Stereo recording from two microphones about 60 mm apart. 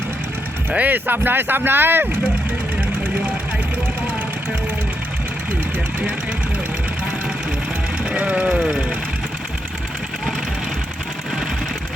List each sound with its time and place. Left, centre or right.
0.9 s speech: right
8.1 s speech: right